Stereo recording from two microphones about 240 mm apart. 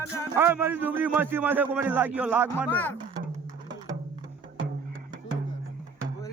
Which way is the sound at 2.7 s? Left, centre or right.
Centre.